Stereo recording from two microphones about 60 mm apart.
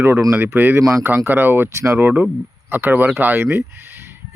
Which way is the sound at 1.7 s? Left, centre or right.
Right.